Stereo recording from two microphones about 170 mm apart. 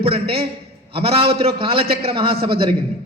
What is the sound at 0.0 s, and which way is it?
A man's voice, 35° right (ahead or behind).